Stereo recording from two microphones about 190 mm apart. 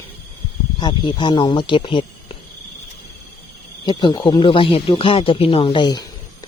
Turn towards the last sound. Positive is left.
turn(degrees=25)  # may be behind; listen again after turning